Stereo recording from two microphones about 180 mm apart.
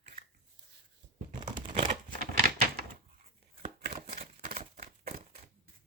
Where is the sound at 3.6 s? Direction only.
40° right (ahead or behind).